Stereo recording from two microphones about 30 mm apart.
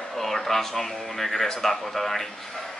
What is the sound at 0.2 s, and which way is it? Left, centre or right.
Speech, centre.